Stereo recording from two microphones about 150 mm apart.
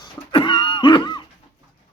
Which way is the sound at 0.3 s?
30° left (ahead or behind).